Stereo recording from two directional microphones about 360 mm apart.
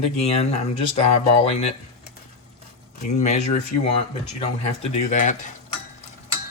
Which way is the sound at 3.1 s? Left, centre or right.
Centre.